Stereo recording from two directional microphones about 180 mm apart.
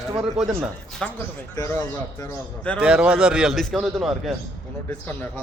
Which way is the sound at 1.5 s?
20° left (ahead or behind).